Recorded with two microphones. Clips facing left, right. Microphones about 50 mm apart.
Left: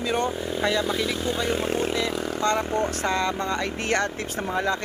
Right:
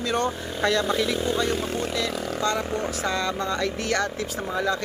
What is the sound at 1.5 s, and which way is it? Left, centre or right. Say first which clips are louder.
Speech: left 2 dB; left.